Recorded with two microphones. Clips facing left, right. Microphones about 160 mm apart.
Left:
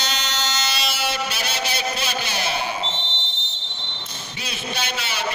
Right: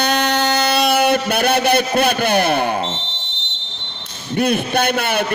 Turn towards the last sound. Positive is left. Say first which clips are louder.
# right 9 dB
turn(degrees=-55)  # may be behind; listen again after turning